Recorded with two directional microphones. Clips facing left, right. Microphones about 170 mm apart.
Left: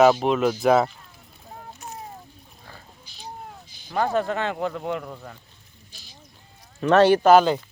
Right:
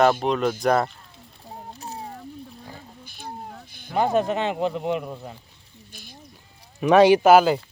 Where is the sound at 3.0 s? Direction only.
55° right (ahead or behind).